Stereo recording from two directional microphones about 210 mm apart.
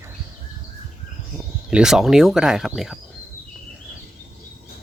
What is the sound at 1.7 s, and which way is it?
Speech, 5° right (ahead or behind).